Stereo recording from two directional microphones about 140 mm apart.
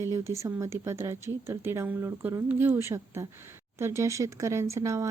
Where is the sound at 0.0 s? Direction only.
20° right (ahead or behind).